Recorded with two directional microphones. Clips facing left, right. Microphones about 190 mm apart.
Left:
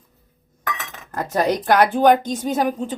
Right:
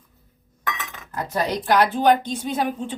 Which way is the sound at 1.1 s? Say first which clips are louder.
Left 4 dB; 50° left (ahead or behind).